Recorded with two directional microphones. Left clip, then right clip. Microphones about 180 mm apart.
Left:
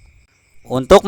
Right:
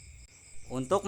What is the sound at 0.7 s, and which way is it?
Speech, 50° left (ahead or behind).